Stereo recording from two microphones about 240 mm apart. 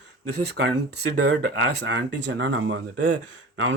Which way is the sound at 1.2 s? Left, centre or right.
Right.